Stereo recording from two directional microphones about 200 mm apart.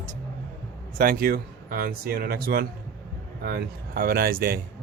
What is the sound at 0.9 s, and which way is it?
Speech, 45° right (ahead or behind).